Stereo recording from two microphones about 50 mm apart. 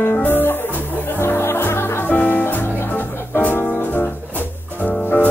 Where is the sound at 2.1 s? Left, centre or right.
Left.